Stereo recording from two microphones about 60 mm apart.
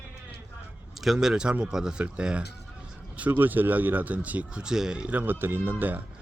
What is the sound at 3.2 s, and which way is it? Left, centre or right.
Speech, right.